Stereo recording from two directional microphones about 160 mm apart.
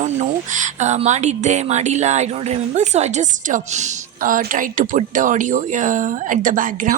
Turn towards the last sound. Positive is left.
turn(degrees=-55)  # may be behind; listen again after turning